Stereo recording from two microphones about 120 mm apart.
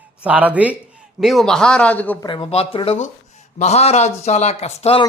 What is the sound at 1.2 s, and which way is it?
Speech, centre (ahead or behind).